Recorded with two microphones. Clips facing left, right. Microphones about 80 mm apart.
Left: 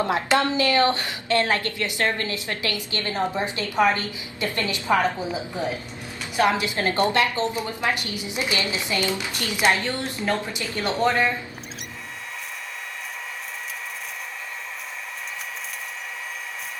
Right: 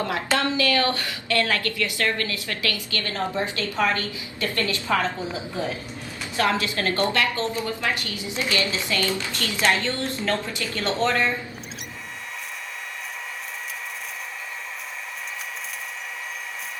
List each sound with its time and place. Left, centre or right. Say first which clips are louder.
0.0 s a woman's voice: left 3 dB; left